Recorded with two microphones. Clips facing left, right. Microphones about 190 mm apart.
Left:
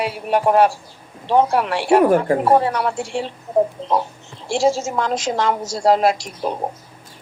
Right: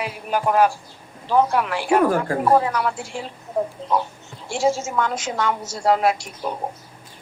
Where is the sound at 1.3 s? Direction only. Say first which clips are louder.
Left 2 dB; 25° left (ahead or behind).